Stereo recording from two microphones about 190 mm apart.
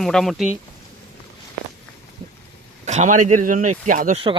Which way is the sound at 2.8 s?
40° right (ahead or behind).